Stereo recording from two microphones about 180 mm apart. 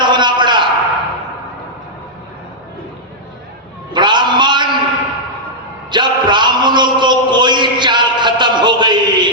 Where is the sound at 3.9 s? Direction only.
25° right (ahead or behind).